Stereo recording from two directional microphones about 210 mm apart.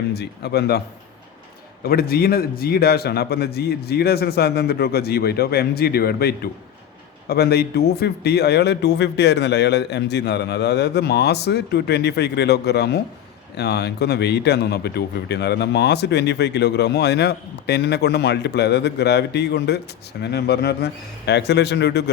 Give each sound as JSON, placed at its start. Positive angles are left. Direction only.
{"t": 0.1, "sound": "speech", "side_deg": 50}
{"t": 1.8, "sound": "speech", "side_deg": 45}